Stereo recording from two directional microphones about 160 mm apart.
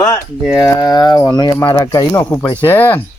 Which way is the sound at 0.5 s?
15° left (ahead or behind).